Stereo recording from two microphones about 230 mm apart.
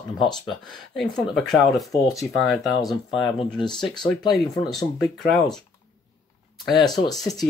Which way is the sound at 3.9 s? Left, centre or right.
Centre.